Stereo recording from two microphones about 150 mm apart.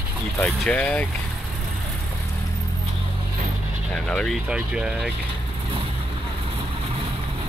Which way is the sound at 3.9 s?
5° left (ahead or behind).